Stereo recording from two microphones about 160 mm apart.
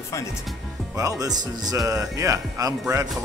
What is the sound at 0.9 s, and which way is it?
Speech, 20° right (ahead or behind).